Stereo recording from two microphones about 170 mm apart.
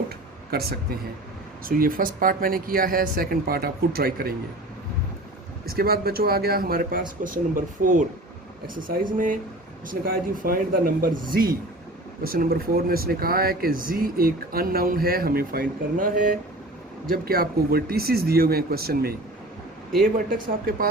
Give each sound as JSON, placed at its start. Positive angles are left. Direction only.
{"t": 0.5, "sound": "speech", "side_deg": -65}
{"t": 5.6, "sound": "speech", "side_deg": -65}